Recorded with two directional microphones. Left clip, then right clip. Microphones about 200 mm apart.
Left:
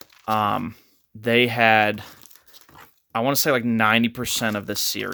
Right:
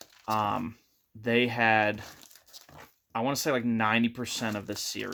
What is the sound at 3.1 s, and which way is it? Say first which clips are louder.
Speech: left 8 dB; 55° left (ahead or behind).